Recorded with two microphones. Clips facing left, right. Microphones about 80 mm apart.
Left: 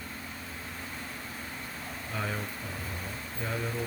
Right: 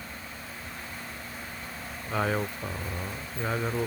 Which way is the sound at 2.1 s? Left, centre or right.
Right.